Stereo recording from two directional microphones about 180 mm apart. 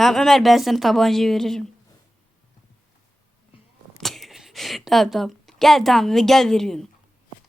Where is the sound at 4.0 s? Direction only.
Centre (ahead or behind).